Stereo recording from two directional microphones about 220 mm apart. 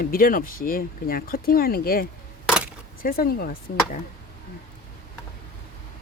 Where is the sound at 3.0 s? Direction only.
40° left (ahead or behind).